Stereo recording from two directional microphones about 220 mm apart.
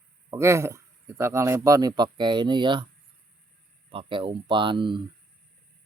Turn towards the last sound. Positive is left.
turn(degrees=-20)  # may be behind; listen again after turning